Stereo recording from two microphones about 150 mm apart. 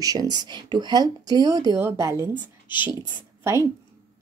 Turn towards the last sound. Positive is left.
turn(degrees=-15)  # may be behind; listen again after turning